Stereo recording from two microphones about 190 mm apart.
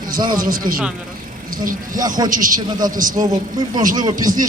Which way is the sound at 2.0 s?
20° right (ahead or behind).